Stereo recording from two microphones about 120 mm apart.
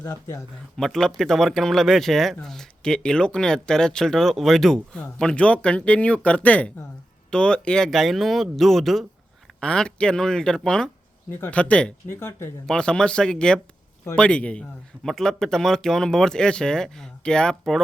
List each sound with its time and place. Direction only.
0.0 s speech: 25° left (ahead or behind)
0.8 s speech: 5° left (ahead or behind)
11.3 s speech: 15° left (ahead or behind)